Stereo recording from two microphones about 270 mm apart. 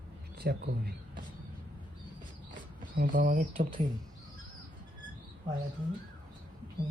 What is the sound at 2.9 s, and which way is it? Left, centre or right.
Speech, right.